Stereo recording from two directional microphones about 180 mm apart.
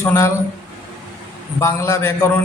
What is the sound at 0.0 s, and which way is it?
Speech, 10° left (ahead or behind).